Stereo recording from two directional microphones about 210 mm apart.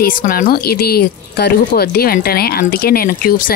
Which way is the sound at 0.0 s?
40° left (ahead or behind).